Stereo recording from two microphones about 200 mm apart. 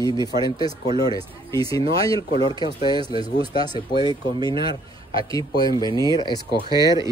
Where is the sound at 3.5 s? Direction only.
20° left (ahead or behind).